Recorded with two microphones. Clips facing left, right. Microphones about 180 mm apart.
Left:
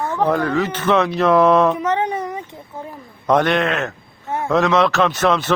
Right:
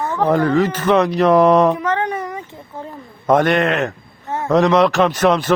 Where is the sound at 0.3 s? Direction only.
15° right (ahead or behind).